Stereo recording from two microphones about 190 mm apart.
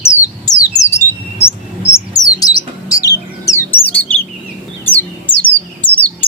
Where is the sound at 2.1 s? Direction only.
20° left (ahead or behind).